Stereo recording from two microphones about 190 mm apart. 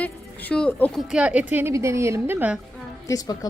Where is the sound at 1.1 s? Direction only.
5° right (ahead or behind).